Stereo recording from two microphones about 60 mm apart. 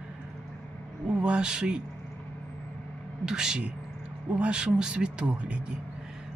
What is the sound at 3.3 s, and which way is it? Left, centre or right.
Speech, centre.